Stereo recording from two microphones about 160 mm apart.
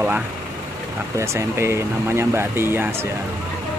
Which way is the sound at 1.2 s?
15° right (ahead or behind).